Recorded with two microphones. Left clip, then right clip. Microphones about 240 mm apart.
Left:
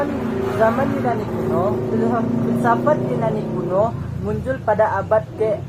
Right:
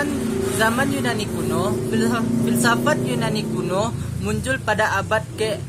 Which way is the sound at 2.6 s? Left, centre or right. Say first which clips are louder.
Left 3 dB; right.